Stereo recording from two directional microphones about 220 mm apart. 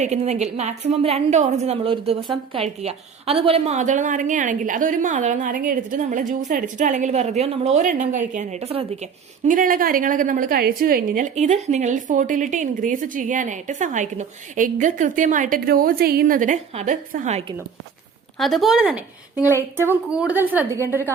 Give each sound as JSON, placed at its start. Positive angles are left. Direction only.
{"t": 0.0, "sound": "a woman's voice", "side_deg": -30}
{"t": 18.3, "sound": "a woman's voice", "side_deg": 0}